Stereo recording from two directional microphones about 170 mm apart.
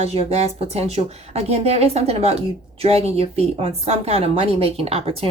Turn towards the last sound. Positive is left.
turn(degrees=-35)  # may be behind; listen again after turning